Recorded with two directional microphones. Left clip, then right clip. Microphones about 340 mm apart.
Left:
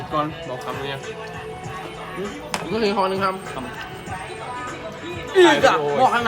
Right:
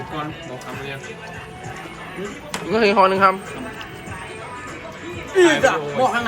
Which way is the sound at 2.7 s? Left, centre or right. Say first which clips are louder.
Right 6 dB; centre.